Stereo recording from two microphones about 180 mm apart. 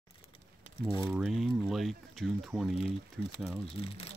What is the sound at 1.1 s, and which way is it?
Speech, centre (ahead or behind).